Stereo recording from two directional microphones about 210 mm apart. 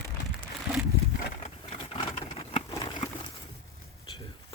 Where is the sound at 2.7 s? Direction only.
20° left (ahead or behind).